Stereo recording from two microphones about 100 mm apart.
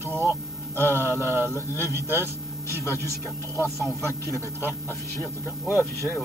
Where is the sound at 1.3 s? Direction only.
20° right (ahead or behind).